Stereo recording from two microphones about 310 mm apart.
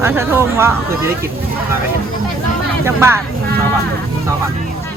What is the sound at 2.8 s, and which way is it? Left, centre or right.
Speech, centre.